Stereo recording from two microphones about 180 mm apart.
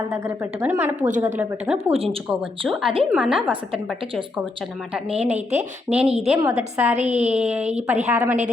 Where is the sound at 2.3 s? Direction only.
Centre (ahead or behind).